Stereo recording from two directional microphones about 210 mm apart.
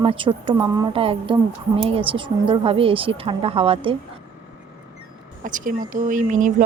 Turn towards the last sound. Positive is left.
turn(degrees=-35)  # may be behind; listen again after turning